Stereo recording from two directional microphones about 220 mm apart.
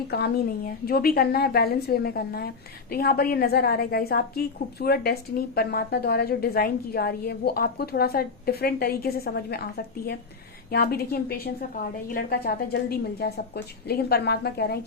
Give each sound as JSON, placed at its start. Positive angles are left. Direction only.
{"t": 0.1, "sound": "a woman's voice", "side_deg": 45}